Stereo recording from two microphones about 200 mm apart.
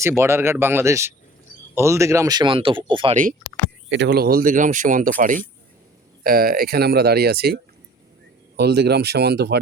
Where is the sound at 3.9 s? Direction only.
60° right (ahead or behind).